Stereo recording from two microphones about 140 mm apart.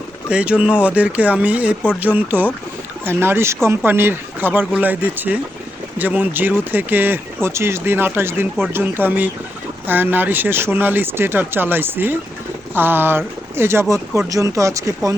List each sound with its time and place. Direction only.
0.3 s speech: 10° right (ahead or behind)